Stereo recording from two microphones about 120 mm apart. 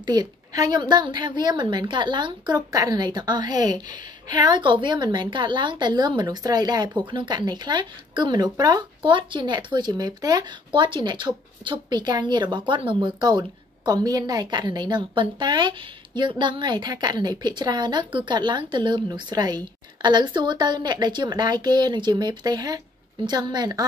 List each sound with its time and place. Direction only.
0.0 s speech: 35° right (ahead or behind)